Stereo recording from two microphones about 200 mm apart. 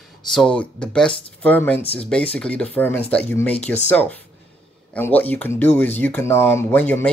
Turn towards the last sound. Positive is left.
turn(degrees=10)  # may be behind; listen again after turning